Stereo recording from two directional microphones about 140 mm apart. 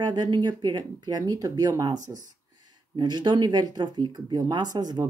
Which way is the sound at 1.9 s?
65° right (ahead or behind).